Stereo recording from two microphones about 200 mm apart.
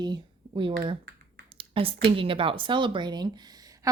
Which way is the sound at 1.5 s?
30° right (ahead or behind).